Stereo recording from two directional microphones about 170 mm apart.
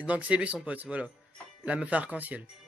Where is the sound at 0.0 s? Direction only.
10° right (ahead or behind).